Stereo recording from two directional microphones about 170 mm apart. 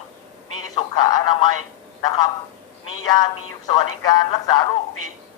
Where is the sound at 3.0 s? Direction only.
25° left (ahead or behind).